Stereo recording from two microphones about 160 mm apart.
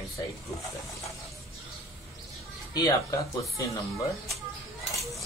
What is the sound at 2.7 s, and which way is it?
Speech, 20° left (ahead or behind).